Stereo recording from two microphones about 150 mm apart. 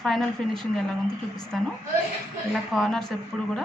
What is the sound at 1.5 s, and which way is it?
Speech, centre (ahead or behind).